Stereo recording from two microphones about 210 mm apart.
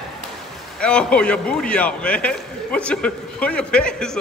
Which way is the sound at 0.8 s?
5° left (ahead or behind).